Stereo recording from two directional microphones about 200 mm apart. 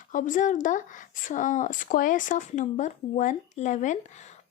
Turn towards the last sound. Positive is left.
turn(degrees=35)  # may be behind; listen again after turning